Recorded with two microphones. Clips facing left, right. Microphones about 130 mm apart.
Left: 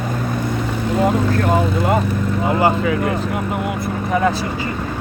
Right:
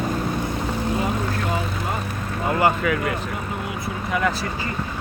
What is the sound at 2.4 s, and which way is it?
Speech, 25° left (ahead or behind).